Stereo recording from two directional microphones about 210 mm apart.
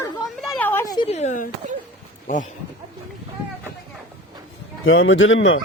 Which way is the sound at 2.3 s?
40° left (ahead or behind).